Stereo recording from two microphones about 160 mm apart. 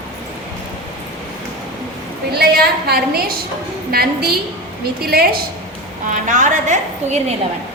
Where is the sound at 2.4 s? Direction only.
80° right.